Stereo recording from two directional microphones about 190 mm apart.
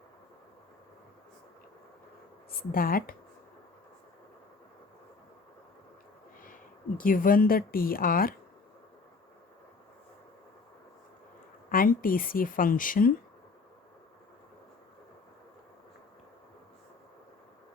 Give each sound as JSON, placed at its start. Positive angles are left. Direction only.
{"t": 2.5, "sound": "speech", "side_deg": 50}
{"t": 6.4, "sound": "speech", "side_deg": 45}
{"t": 11.7, "sound": "speech", "side_deg": 50}